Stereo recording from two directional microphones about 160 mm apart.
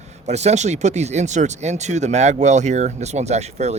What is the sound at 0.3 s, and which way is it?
Speech, 45° right (ahead or behind).